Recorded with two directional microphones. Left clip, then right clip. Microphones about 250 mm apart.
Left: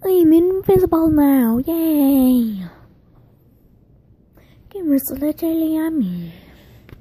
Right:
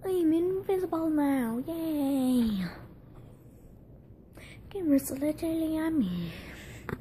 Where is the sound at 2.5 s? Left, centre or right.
Centre.